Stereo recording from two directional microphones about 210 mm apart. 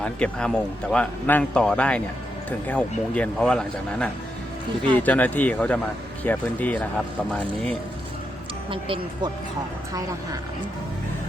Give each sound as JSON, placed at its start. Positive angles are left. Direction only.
{"t": 0.0, "sound": "a man's voice", "side_deg": 5}
{"t": 8.7, "sound": "speech", "side_deg": -25}